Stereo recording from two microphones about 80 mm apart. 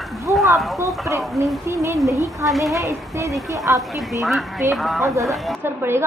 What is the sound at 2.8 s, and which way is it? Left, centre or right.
A woman's voice, right.